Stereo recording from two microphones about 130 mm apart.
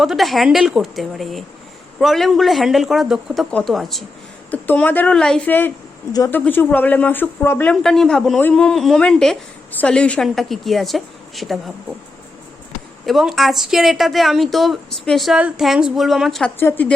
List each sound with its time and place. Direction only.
0.0 s a woman's voice: centre (ahead or behind)
4.5 s speech: 15° left (ahead or behind)
7.7 s a woman's voice: 5° left (ahead or behind)
13.1 s a woman's voice: centre (ahead or behind)
16.6 s speech: 15° left (ahead or behind)